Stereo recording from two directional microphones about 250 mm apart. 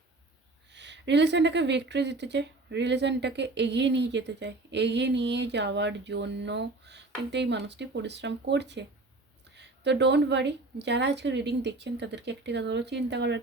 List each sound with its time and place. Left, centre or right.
0.7 s speech: right